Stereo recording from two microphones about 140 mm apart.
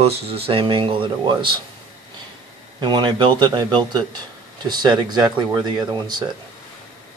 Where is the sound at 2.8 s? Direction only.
30° right (ahead or behind).